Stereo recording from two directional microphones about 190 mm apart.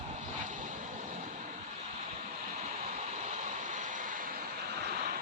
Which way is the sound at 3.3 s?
40° right (ahead or behind).